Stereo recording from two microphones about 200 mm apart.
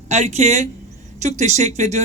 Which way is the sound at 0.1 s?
35° right (ahead or behind).